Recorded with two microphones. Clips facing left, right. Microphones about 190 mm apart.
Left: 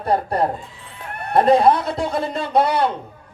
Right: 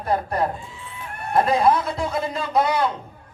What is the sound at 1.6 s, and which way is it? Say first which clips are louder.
Speech: left 3 dB; 30° left (ahead or behind).